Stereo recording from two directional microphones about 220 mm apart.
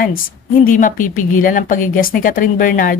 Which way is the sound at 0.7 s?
35° left (ahead or behind).